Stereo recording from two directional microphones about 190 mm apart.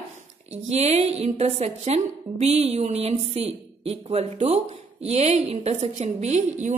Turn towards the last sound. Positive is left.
turn(degrees=-40)  # may be behind; listen again after turning